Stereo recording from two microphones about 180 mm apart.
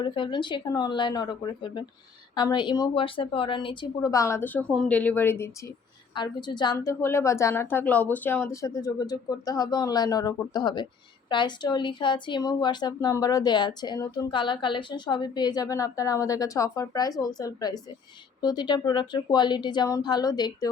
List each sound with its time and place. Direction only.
0.0 s speech: 25° left (ahead or behind)
6.1 s speech: 25° left (ahead or behind)